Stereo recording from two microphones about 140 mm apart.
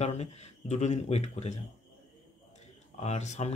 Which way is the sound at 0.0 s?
50° left (ahead or behind).